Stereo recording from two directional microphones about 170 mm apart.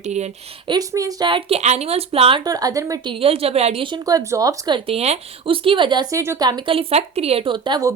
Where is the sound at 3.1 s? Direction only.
35° right (ahead or behind); by 4.8 s 20° right (ahead or behind).